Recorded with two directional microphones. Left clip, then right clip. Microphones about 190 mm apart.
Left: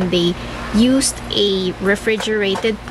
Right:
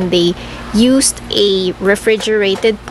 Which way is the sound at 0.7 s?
15° right (ahead or behind).